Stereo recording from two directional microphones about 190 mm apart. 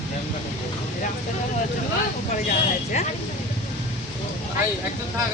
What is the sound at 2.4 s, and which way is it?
Speech, 40° left (ahead or behind).